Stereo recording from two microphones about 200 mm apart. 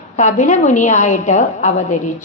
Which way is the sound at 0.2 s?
35° left (ahead or behind).